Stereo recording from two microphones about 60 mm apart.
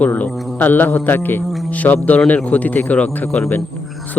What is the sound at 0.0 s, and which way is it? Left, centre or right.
A man's voice, left.